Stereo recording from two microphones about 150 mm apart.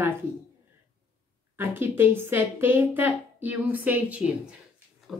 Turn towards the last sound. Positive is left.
turn(degrees=-10)  # may be behind; listen again after turning